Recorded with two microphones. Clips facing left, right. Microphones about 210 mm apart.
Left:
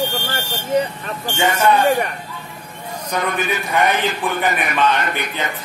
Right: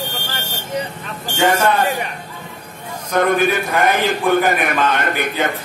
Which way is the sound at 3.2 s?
50° right (ahead or behind).